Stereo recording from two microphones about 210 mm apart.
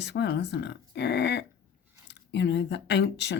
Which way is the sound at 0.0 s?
55° left (ahead or behind).